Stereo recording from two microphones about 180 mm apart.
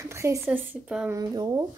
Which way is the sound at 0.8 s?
5° right (ahead or behind).